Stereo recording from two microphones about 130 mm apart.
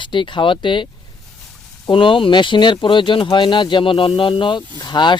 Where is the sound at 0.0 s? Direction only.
40° left (ahead or behind).